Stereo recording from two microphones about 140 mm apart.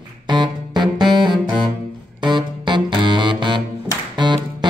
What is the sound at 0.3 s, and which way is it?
Music, 30° right (ahead or behind).